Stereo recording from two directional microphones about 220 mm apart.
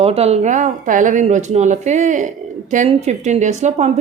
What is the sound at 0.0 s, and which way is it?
Speech, 30° right (ahead or behind).